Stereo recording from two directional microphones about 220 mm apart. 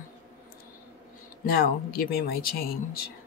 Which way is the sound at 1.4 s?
45° left (ahead or behind).